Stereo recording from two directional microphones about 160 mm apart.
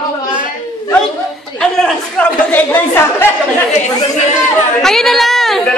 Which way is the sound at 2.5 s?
15° left (ahead or behind).